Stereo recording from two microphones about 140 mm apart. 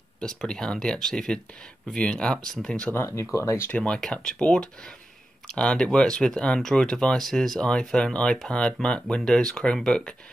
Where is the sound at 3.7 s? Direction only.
10° left (ahead or behind).